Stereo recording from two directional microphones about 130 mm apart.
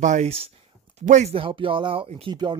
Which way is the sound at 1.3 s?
45° right (ahead or behind).